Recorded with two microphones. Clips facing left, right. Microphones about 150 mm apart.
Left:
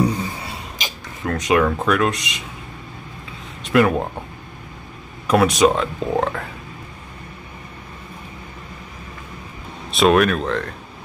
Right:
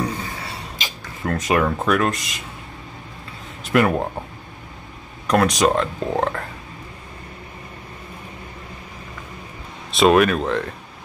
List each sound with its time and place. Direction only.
0.0 s gasp: 15° left (ahead or behind)
1.2 s speech: centre (ahead or behind)
3.6 s a sound: centre (ahead or behind)
5.2 s speech: 5° left (ahead or behind)
9.8 s speech: centre (ahead or behind)